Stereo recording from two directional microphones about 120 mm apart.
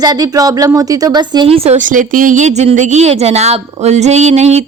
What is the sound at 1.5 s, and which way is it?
A woman's voice, 75° right (ahead or behind).